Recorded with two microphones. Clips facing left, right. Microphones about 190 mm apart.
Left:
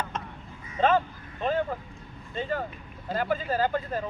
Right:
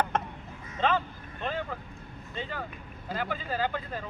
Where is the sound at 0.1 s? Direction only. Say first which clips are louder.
Right 6 dB; 60° right (ahead or behind).